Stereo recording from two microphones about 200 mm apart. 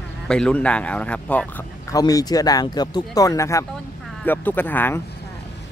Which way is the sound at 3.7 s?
5° left (ahead or behind).